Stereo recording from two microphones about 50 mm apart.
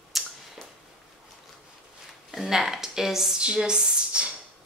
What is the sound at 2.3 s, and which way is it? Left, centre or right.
A woman's voice, centre.